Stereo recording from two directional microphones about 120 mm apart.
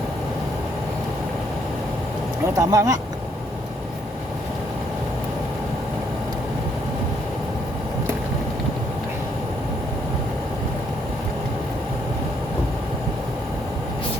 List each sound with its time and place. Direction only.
2.6 s speech: 30° right (ahead or behind)